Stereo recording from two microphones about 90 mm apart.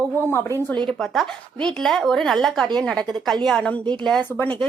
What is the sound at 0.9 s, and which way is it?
Speech, 5° left (ahead or behind).